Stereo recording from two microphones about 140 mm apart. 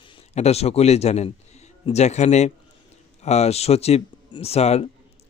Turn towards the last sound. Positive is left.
turn(degrees=50)  # may be behind; listen again after turning